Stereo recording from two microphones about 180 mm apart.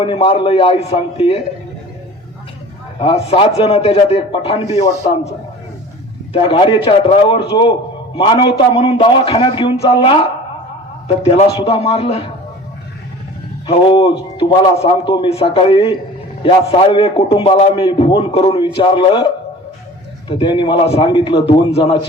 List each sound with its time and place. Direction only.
0.0 s a man's voice: 30° left (ahead or behind)
3.0 s a man's voice: 30° left (ahead or behind)
6.3 s a man's voice: 30° left (ahead or behind)
11.5 s a man's voice: 35° left (ahead or behind)
13.7 s a man's voice: 30° left (ahead or behind)